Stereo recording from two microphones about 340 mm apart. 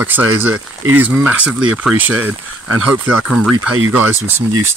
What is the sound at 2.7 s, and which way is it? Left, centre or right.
Speech, right.